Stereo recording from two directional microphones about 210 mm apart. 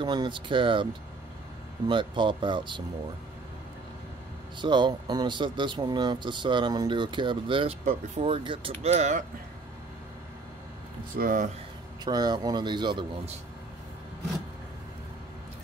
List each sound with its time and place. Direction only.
0.0 s speech: 20° right (ahead or behind)
1.9 s speech: 25° right (ahead or behind)
4.6 s speech: 20° right (ahead or behind)
11.1 s speech: 40° right (ahead or behind)
12.0 s speech: 20° right (ahead or behind)